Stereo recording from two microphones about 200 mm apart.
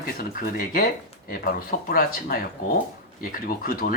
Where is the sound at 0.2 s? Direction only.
45° left (ahead or behind).